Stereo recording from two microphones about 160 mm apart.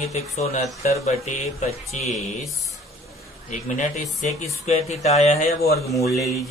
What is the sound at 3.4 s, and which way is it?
Speech, 50° left (ahead or behind).